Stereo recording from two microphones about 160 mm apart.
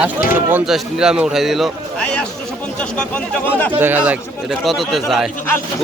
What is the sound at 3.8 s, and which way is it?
A man's voice, 10° right (ahead or behind).